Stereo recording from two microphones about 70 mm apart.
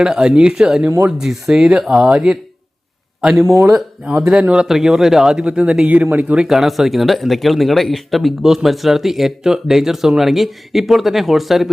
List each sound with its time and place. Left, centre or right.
0.0 s speech: centre
0.9 s speech: right
1.2 s speech: centre
3.4 s speech: right
3.7 s speech: centre
4.2 s speech: centre